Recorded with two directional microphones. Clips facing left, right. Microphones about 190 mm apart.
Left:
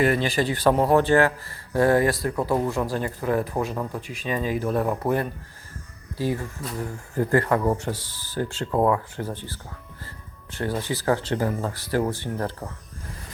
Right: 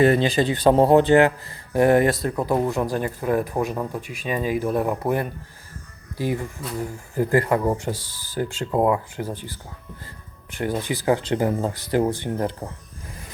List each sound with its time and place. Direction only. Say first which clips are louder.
0.0 s speech: right 4 dB; 25° right (ahead or behind)